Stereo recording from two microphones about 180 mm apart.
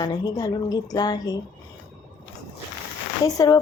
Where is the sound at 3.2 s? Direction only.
20° left (ahead or behind).